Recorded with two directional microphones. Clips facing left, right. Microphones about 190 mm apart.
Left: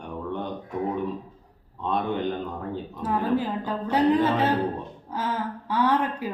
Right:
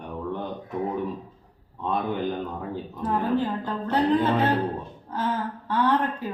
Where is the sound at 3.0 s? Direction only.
10° left (ahead or behind).